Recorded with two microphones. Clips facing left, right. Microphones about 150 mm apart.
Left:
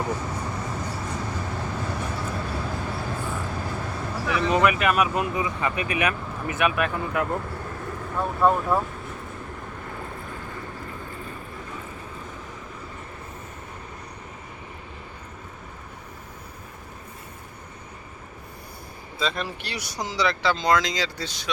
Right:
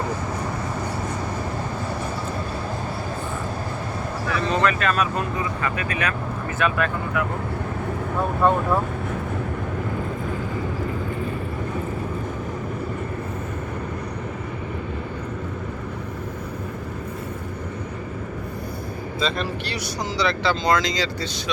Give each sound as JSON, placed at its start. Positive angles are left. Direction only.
{"t": 4.3, "sound": "speech", "side_deg": 15}
{"t": 8.4, "sound": "speech", "side_deg": 5}
{"t": 19.2, "sound": "speech", "side_deg": 10}